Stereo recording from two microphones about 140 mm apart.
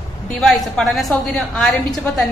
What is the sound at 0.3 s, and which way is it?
A woman's voice, centre (ahead or behind).